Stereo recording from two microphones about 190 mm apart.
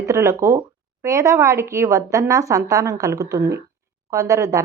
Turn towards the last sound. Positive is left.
turn(degrees=-15)  # may be behind; listen again after turning